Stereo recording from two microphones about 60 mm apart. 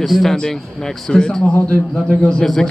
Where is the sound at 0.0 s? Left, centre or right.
Centre.